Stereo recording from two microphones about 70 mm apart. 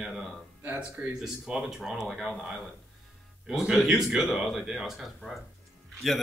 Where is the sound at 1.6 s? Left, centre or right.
Centre.